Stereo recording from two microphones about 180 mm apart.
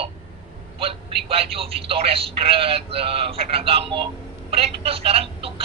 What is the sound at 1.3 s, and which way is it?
Speech, 30° right (ahead or behind).